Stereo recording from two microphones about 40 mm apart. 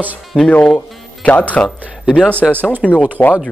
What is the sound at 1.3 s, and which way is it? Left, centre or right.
Speech, left.